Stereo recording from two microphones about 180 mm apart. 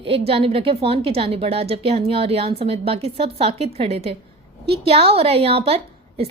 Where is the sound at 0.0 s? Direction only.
30° right (ahead or behind).